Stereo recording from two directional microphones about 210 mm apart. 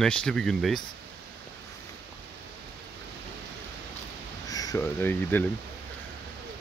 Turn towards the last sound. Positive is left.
turn(degrees=10)  # may be behind; listen again after turning